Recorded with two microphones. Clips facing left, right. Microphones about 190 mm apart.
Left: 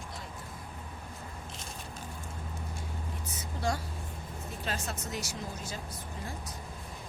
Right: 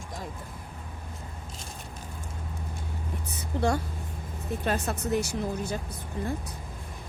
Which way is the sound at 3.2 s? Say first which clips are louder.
Right 6 dB; 60° right (ahead or behind).